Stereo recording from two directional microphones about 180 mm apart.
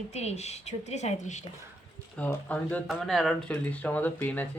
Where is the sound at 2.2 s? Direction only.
10° left (ahead or behind).